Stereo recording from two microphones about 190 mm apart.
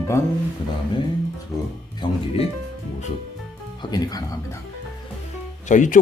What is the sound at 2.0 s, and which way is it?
Speech, 25° left (ahead or behind).